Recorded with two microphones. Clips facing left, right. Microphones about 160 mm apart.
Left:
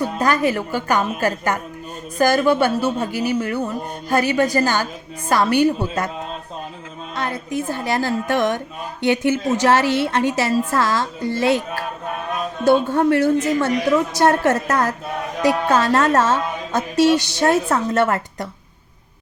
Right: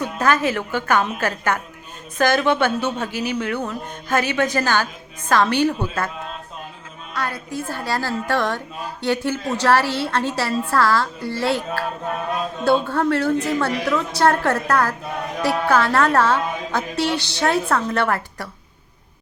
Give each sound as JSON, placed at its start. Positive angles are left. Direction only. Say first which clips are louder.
{"t": 0.2, "sound": "a woman's voice", "louder": "even", "side_deg": 15}
{"t": 7.1, "sound": "a woman's voice", "louder": "left 2 dB", "side_deg": 20}